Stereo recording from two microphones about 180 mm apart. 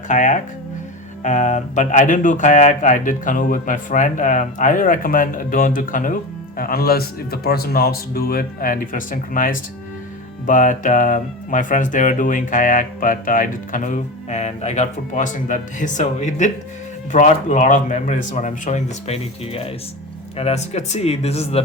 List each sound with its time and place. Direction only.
0.1 s speech: 45° left (ahead or behind)